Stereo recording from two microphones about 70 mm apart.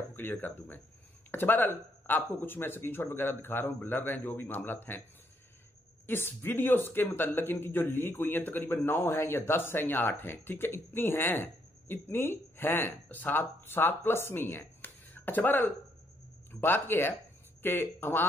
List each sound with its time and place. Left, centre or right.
0.1 s speech: left
6.0 s speech: left
14.8 s a sound: left
16.6 s speech: left